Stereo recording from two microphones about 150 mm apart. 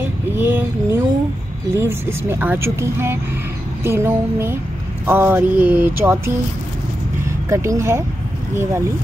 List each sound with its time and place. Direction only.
0.0 s a sound: 15° right (ahead or behind)
1.8 s speech: 15° right (ahead or behind)
7.4 s speech: 20° right (ahead or behind)